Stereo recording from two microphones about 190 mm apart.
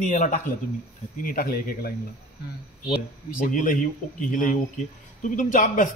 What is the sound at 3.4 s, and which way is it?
A man's voice, 45° left (ahead or behind).